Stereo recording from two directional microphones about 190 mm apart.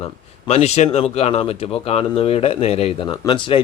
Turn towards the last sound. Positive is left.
turn(degrees=25)  # may be behind; listen again after turning